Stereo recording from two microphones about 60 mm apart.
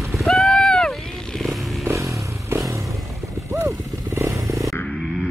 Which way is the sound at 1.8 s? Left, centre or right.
Right.